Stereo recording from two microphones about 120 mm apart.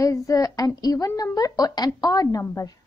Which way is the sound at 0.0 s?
25° left (ahead or behind).